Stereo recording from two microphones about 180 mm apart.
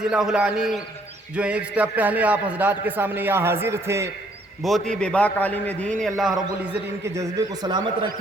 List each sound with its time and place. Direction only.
0.1 s a man's voice: 5° right (ahead or behind)
4.6 s a man's voice: centre (ahead or behind)
7.0 s a man's voice: 15° right (ahead or behind)